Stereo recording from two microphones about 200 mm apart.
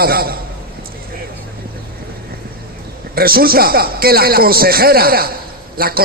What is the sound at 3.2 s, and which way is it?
A man's voice, 50° right (ahead or behind).